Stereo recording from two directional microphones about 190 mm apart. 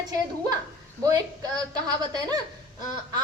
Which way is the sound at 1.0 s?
20° right (ahead or behind).